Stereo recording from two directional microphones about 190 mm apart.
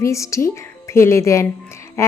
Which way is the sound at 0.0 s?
15° left (ahead or behind).